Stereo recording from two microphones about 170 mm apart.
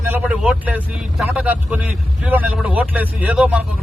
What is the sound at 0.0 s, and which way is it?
Speech, 10° right (ahead or behind).